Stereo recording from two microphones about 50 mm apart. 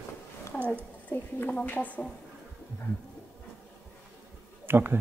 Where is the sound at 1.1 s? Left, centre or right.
Left.